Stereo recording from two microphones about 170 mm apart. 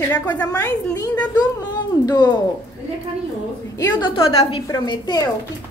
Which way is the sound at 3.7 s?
25° left (ahead or behind).